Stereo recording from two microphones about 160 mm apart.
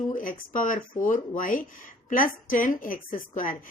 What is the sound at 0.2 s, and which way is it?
Speech, 55° left (ahead or behind).